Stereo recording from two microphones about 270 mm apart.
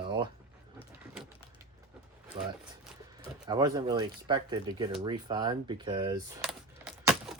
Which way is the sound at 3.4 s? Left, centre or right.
Centre.